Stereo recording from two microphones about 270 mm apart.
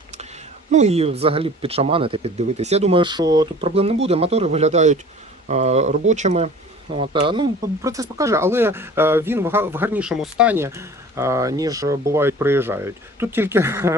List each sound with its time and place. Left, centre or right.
0.7 s speech: right; by 13.9 s centre